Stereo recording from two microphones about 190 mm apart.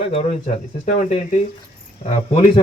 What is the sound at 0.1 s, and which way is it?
Speech, 30° left (ahead or behind).